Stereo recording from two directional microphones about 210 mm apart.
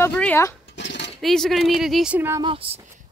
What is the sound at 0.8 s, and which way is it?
Cutlery, 55° left (ahead or behind).